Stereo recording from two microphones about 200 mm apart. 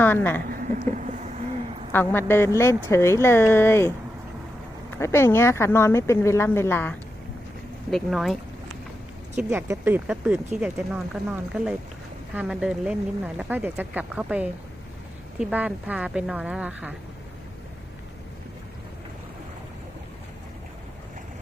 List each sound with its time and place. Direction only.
0.0 s speech: 10° left (ahead or behind)
0.6 s a sound: 40° right (ahead or behind)
1.9 s a woman's voice: 10° left (ahead or behind)
4.9 s a woman's voice: 15° left (ahead or behind)
9.3 s speech: 10° right (ahead or behind)